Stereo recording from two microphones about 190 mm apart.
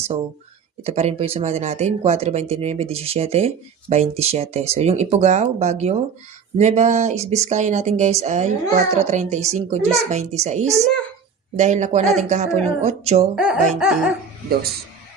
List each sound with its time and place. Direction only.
0.9 s speech: 35° right (ahead or behind)
13.3 s laughter: 5° right (ahead or behind)